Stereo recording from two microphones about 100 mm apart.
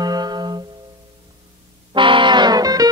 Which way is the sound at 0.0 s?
45° right (ahead or behind).